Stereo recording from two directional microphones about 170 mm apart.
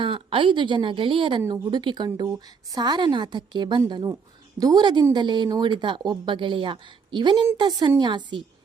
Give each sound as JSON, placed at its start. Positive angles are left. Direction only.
{"t": 0.0, "sound": "a woman's voice", "side_deg": -30}